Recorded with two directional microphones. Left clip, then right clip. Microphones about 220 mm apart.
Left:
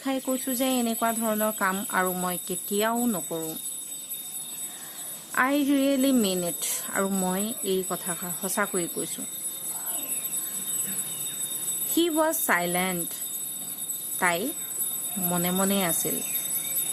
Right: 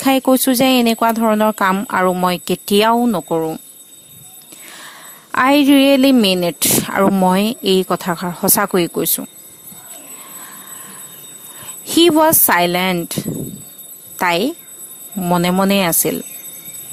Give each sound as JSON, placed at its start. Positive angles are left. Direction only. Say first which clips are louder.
{"t": 0.0, "sound": "a woman's voice", "louder": "right 15 dB", "side_deg": -40}
{"t": 5.3, "sound": "a woman's voice", "louder": "right 12 dB", "side_deg": -45}
{"t": 11.9, "sound": "a woman's voice", "louder": "right 13 dB", "side_deg": -40}
{"t": 14.2, "sound": "a woman's voice", "louder": "right 10 dB", "side_deg": -40}